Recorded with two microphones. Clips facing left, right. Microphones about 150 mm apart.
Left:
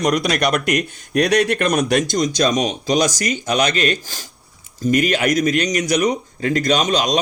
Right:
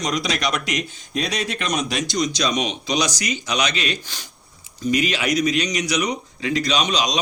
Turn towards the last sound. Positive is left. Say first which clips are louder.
# left 4 dB
turn(degrees=50)  # may be behind; listen again after turning